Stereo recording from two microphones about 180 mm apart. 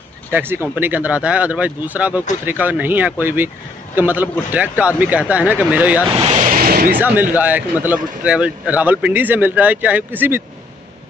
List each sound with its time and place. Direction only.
0.3 s speech: 10° right (ahead or behind)
6.4 s a sound: 50° right (ahead or behind)
7.0 s speech: 10° right (ahead or behind)